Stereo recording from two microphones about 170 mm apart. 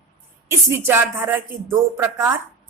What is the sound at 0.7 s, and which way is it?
A woman's voice, 15° right (ahead or behind).